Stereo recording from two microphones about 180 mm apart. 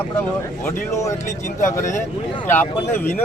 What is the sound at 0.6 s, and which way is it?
A man's voice, 15° left (ahead or behind).